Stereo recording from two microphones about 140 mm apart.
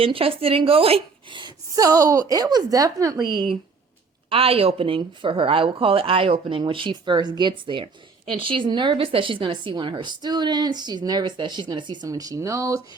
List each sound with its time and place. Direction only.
0.0 s a woman's voice: 40° right (ahead or behind)
4.3 s speech: 45° right (ahead or behind); by 12.8 s 20° right (ahead or behind)